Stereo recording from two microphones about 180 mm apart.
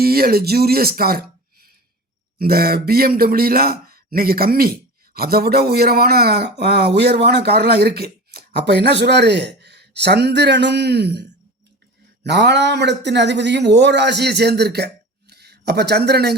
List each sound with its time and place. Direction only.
0.0 s a man's voice: 60° right (ahead or behind)